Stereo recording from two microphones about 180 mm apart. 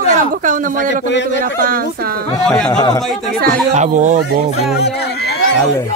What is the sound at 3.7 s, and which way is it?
Speech, 40° right (ahead or behind).